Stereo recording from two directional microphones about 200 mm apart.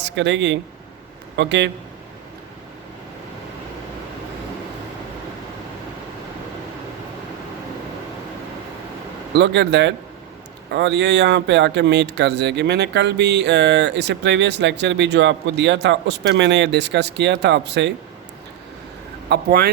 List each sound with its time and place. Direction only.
0.0 s speech: 60° right (ahead or behind)
9.3 s speech: 60° right (ahead or behind)
19.3 s speech: 50° right (ahead or behind)